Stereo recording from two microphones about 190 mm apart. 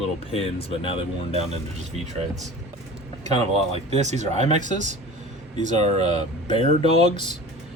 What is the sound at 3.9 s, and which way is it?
Speech, 35° right (ahead or behind).